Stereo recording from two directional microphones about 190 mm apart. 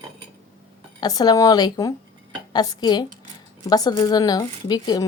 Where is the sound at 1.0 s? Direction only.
20° left (ahead or behind).